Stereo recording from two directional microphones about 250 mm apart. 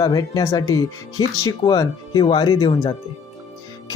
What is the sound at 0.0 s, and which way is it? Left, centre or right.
Speech, centre.